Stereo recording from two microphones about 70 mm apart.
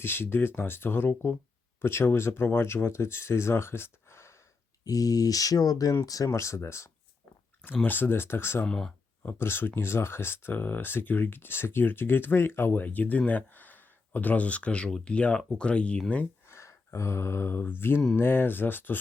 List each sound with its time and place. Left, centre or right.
0.0 s speech: left
4.9 s speech: left
7.6 s speech: left
8.6 s speech: centre
9.2 s speech: left; by 16.2 s centre
16.5 s mantra: left
18.2 s speech: left